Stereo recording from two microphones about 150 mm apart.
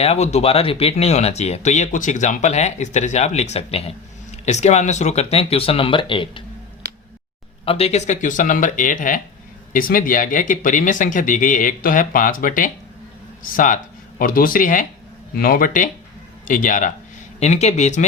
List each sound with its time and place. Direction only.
0.0 s speech: 45° left (ahead or behind)
7.6 s speech: 40° left (ahead or behind); by 14.8 s 65° left (ahead or behind)
15.4 s speech: 75° left (ahead or behind)
17.4 s speech: 50° left (ahead or behind)